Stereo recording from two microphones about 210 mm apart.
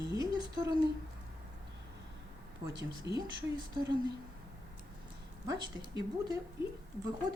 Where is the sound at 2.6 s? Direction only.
20° right (ahead or behind).